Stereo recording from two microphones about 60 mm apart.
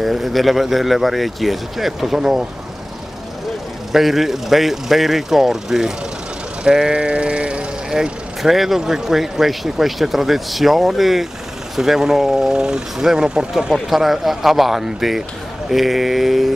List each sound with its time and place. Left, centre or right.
0.0 s speech: centre
3.9 s speech: centre